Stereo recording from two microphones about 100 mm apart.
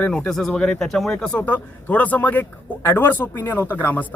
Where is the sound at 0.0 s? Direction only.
10° left (ahead or behind).